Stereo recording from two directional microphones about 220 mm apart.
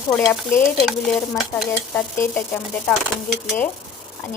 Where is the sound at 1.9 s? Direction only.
10° left (ahead or behind).